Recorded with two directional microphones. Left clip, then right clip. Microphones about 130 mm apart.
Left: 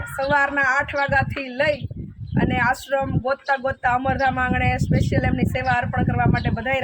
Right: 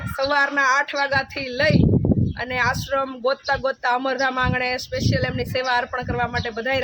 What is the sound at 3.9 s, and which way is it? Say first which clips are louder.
Speech: left 1 dB; 35° right (ahead or behind).